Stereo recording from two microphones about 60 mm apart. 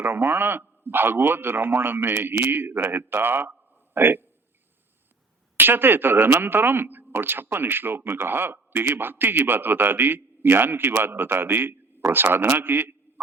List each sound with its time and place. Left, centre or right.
0.0 s a man's voice: right
5.5 s a man's voice: right